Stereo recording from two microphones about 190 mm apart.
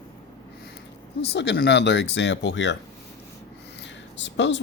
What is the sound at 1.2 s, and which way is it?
Speech, 65° left (ahead or behind).